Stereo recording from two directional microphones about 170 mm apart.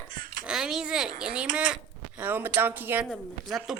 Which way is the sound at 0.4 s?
5° right (ahead or behind).